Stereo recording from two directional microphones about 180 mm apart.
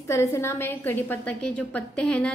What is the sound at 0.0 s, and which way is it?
A woman's voice, 15° left (ahead or behind).